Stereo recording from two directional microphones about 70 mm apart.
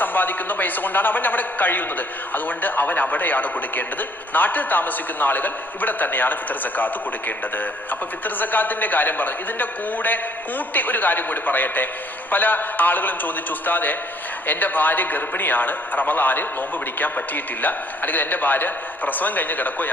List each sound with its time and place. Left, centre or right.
0.0 s a man's voice: left